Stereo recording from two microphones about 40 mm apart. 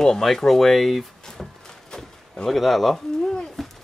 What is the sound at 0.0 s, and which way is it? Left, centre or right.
Speech, centre.